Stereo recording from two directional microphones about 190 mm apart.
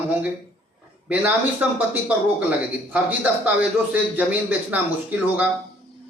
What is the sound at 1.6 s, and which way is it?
A man's voice, 10° right (ahead or behind).